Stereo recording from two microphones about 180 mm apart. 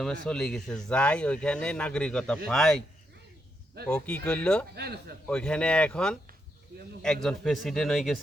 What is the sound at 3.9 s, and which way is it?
Speech, 5° left (ahead or behind).